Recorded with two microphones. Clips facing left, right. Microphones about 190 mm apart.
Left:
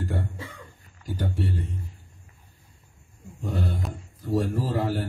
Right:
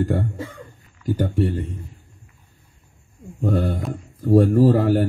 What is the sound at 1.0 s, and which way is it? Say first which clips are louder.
Speech: right 9 dB; 55° right (ahead or behind).